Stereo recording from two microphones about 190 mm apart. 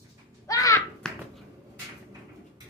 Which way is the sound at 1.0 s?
5° left (ahead or behind).